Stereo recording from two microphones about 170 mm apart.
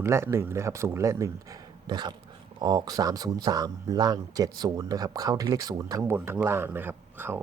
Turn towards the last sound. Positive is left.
turn(degrees=-15)  # may be behind; listen again after turning